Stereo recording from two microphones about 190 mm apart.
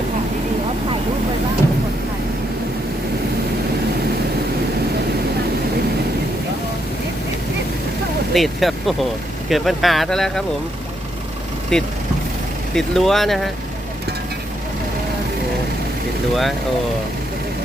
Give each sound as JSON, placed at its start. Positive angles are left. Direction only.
{"t": 8.3, "sound": "speech", "side_deg": 0}
{"t": 11.7, "sound": "speech", "side_deg": 5}
{"t": 16.3, "sound": "speech", "side_deg": 0}